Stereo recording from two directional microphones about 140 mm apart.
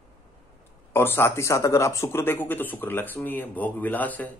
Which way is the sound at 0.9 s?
15° left (ahead or behind).